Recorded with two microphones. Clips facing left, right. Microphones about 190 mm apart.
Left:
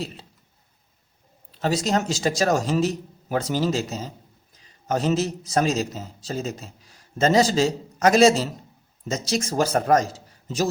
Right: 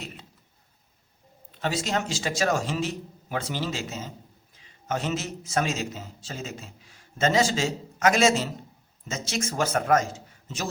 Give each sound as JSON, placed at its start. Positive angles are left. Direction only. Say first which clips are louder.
{"t": 0.0, "sound": "speech", "louder": "left 8 dB", "side_deg": 30}
{"t": 1.5, "sound": "a man's voice", "louder": "left 5 dB", "side_deg": 40}